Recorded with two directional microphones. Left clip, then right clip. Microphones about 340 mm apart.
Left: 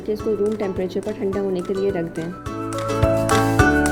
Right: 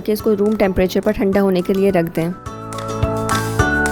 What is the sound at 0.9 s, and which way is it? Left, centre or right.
Speech, right.